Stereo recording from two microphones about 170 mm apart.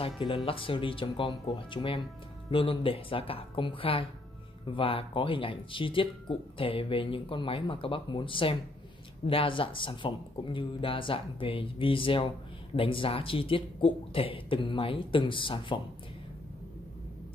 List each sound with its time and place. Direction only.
0.0 s speech: 30° left (ahead or behind)